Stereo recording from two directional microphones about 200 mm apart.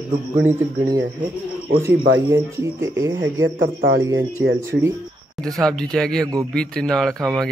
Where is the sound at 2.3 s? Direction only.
15° right (ahead or behind).